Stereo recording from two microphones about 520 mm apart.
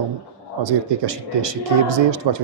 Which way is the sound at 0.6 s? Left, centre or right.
Right.